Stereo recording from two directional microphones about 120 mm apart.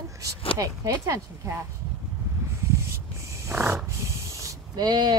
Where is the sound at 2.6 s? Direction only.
25° right (ahead or behind).